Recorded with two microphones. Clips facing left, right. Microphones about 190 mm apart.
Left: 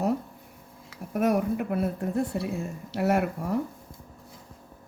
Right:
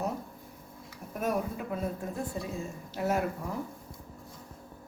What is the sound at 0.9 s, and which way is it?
Speech, 70° left (ahead or behind).